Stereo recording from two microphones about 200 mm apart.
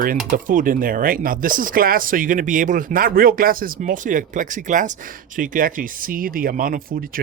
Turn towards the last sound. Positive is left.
turn(degrees=-45)  # may be behind; listen again after turning